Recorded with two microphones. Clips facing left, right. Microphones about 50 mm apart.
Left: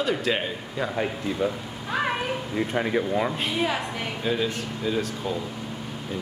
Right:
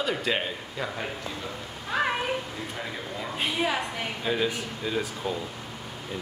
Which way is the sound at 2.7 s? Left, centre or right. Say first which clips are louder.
Left 13 dB; left.